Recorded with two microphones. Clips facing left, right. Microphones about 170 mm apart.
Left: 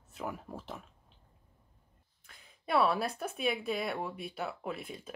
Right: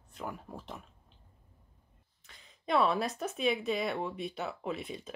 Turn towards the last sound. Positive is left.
turn(degrees=5)  # may be behind; listen again after turning